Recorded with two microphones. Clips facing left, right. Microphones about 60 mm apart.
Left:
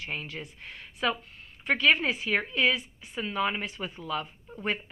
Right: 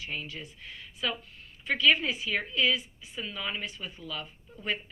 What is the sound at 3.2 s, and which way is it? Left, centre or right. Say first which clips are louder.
A woman's voice: left 6 dB; left.